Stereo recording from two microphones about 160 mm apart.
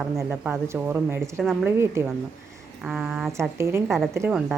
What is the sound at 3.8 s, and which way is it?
Speech, centre (ahead or behind).